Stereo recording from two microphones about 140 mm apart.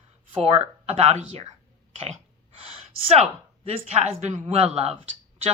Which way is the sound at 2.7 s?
45° right (ahead or behind).